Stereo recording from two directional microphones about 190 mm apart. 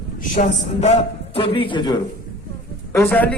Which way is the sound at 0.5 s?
35° left (ahead or behind).